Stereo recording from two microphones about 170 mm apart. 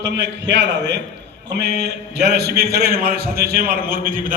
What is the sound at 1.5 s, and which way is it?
A man's voice, 75° right (ahead or behind).